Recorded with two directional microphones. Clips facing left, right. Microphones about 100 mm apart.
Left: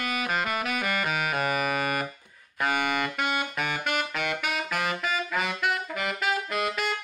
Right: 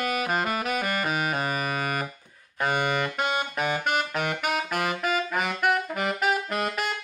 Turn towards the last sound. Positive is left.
turn(degrees=-40)  # may be behind; listen again after turning